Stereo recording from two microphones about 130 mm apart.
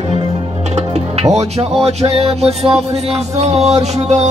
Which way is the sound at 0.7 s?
55° right (ahead or behind).